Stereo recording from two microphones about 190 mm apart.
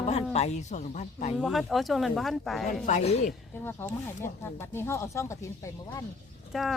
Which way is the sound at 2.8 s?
35° left (ahead or behind).